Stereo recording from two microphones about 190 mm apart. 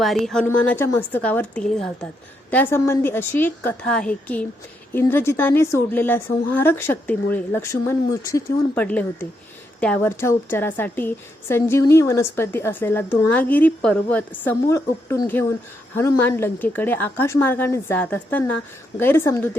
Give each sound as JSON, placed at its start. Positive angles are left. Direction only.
{"t": 0.0, "sound": "a woman's voice", "side_deg": 0}
{"t": 16.0, "sound": "a woman's voice", "side_deg": 10}